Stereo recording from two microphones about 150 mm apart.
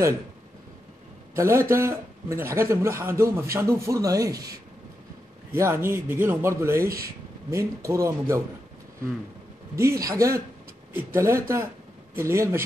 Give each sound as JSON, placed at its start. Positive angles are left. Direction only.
{"t": 1.3, "sound": "a man's voice", "side_deg": -20}
{"t": 9.8, "sound": "a man's voice", "side_deg": -20}